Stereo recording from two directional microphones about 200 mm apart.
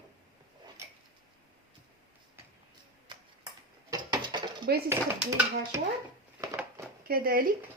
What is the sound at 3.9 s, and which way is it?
Mechanisms, 20° right (ahead or behind).